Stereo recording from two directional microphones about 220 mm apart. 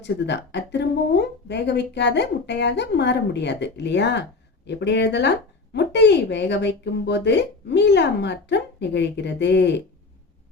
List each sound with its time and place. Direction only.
0.0 s a woman's voice: 50° left (ahead or behind)